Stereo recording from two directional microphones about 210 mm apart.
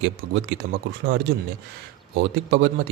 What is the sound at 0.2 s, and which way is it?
A man's voice, 45° right (ahead or behind).